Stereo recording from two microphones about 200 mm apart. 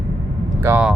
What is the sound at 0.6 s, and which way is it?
Speech, 10° right (ahead or behind).